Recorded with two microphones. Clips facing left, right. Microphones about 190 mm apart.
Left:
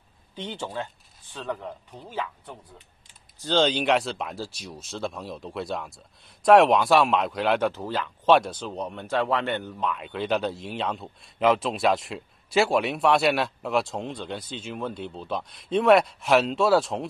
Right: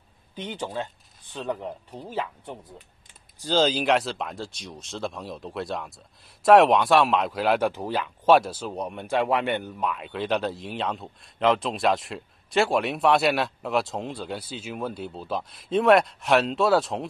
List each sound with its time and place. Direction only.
0.4 s speech: 15° right (ahead or behind)
3.3 s a man's voice: 10° right (ahead or behind)